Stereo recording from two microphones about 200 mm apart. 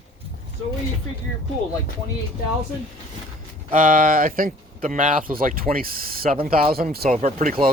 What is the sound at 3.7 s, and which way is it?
Speech, 45° right (ahead or behind).